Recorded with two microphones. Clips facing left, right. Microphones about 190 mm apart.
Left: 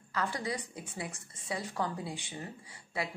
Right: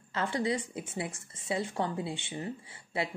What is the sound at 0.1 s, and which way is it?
A woman's voice, 25° right (ahead or behind).